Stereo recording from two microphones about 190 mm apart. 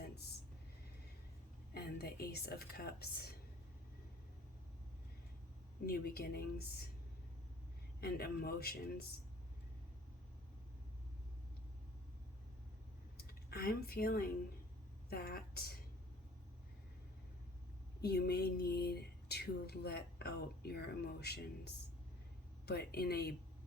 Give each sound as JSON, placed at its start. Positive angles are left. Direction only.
{"t": 1.7, "sound": "speech", "side_deg": 55}
{"t": 5.8, "sound": "speech", "side_deg": 55}
{"t": 8.0, "sound": "speech", "side_deg": 55}
{"t": 13.1, "sound": "a woman's voice", "side_deg": 55}
{"t": 18.0, "sound": "speech", "side_deg": 60}